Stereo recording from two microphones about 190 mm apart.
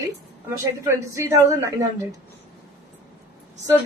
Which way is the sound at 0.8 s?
15° right (ahead or behind).